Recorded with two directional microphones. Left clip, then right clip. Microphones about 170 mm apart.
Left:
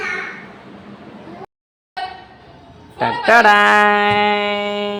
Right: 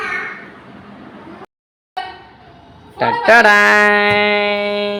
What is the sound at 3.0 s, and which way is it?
Speech, 5° right (ahead or behind).